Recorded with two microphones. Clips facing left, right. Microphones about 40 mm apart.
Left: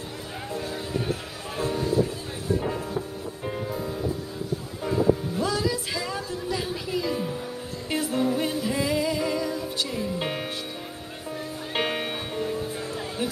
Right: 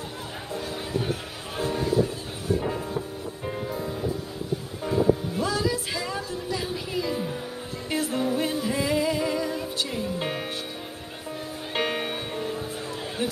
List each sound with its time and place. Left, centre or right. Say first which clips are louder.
1.6 s music: even; right
2.6 s music: even; centre
5.4 s music: even; centre
10.1 s music: even; centre
11.7 s music: even; centre